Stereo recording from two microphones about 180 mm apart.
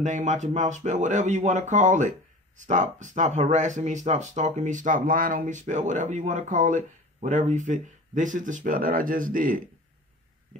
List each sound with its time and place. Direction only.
0.0 s speech: 40° right (ahead or behind)